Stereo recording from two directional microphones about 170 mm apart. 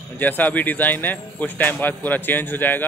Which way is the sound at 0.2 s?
10° left (ahead or behind).